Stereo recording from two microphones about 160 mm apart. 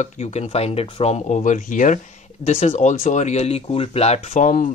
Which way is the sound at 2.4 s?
40° left (ahead or behind).